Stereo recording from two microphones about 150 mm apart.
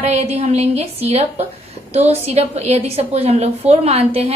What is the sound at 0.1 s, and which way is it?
A woman's voice, 45° right (ahead or behind).